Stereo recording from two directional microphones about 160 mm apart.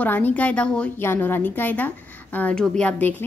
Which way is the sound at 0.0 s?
10° left (ahead or behind).